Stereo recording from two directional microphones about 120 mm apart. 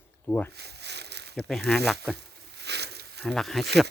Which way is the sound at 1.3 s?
5° left (ahead or behind).